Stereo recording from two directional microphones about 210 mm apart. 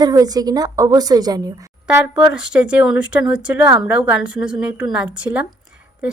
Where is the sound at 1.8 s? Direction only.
5° right (ahead or behind).